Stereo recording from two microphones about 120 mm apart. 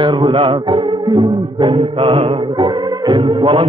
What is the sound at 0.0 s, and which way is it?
Music, 40° right (ahead or behind).